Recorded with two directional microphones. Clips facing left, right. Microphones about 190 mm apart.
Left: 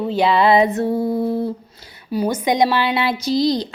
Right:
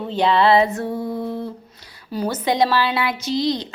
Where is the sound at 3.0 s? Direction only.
35° left (ahead or behind).